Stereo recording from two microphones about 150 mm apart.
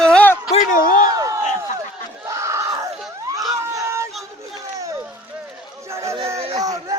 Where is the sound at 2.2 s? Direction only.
20° right (ahead or behind).